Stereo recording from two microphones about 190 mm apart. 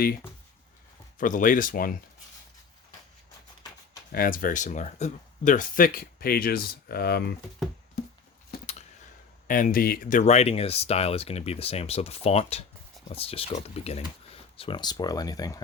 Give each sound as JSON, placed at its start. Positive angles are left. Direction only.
{"t": 1.2, "sound": "speech", "side_deg": 45}
{"t": 4.1, "sound": "speech", "side_deg": 50}
{"t": 9.5, "sound": "speech", "side_deg": 45}